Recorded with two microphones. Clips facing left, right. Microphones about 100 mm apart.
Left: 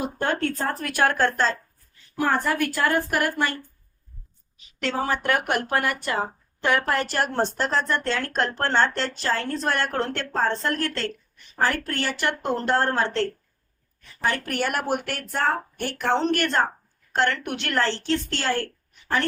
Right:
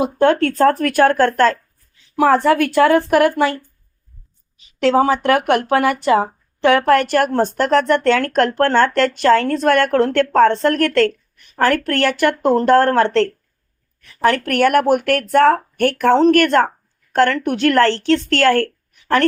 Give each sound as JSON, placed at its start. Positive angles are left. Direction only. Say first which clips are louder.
{"t": 0.0, "sound": "speech", "louder": "right 11 dB", "side_deg": -90}
{"t": 2.1, "sound": "a woman's voice", "louder": "right 10 dB", "side_deg": -90}
{"t": 4.8, "sound": "speech", "louder": "right 11 dB", "side_deg": -90}
{"t": 10.3, "sound": "speech", "louder": "right 10 dB", "side_deg": -75}